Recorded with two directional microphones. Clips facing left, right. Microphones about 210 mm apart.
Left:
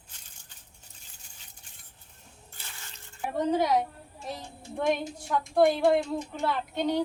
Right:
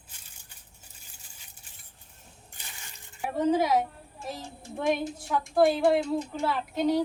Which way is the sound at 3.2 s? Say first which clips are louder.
Right 2 dB; 5° right (ahead or behind).